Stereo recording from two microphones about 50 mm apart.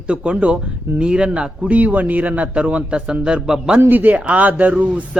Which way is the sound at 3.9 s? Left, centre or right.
Right.